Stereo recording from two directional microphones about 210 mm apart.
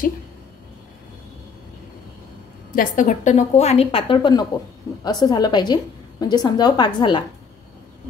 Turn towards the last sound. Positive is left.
turn(degrees=20)  # may be behind; listen again after turning